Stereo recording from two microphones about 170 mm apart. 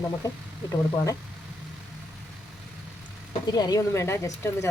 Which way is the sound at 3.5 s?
25° left (ahead or behind).